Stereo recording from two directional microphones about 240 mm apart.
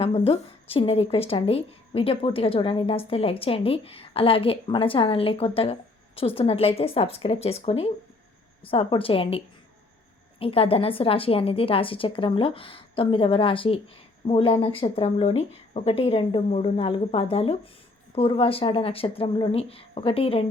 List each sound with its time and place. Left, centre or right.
0.0 s a woman's voice: left
10.4 s a woman's voice: left